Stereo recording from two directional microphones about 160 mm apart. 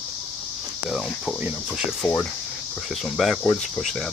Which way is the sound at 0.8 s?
Centre (ahead or behind).